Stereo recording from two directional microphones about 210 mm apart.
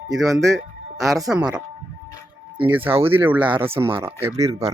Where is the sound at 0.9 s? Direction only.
15° right (ahead or behind).